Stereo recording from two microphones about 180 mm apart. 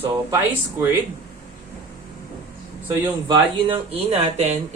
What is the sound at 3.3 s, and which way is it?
Speech, 30° right (ahead or behind).